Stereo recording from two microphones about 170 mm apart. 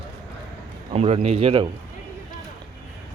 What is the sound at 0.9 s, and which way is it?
Speech, 35° right (ahead or behind).